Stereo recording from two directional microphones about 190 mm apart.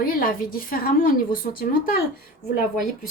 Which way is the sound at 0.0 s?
50° left (ahead or behind).